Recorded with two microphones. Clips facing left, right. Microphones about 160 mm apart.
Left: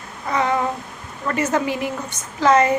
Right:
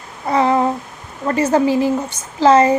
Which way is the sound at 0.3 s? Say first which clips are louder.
Right 6 dB; 30° right (ahead or behind).